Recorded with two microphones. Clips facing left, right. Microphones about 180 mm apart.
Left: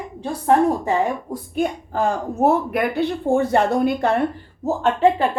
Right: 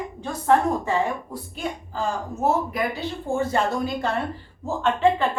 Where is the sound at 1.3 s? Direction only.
55° left (ahead or behind).